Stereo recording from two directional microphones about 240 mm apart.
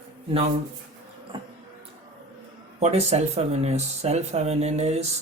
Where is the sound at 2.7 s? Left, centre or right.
Right.